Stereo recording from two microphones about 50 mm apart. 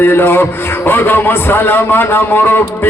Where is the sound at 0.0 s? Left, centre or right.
Left.